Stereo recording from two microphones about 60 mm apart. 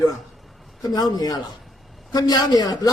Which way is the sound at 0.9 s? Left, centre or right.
Left.